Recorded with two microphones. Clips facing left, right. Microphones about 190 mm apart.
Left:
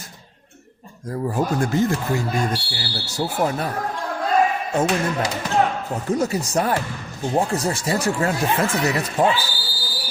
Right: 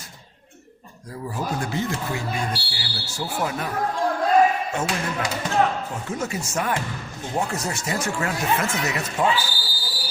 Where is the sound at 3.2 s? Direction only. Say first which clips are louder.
Left 5 dB; 35° left (ahead or behind).